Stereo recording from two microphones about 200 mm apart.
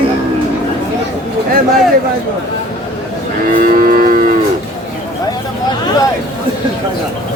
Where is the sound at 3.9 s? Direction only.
45° right (ahead or behind).